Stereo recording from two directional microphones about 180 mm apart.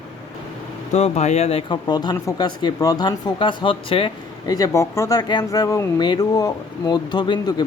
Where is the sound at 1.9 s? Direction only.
25° left (ahead or behind).